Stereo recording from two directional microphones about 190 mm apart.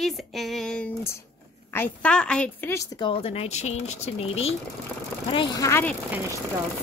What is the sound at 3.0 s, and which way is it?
Speech, 30° left (ahead or behind).